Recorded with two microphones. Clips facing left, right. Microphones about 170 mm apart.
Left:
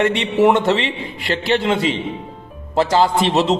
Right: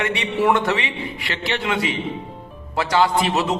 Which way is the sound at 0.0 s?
25° left (ahead or behind).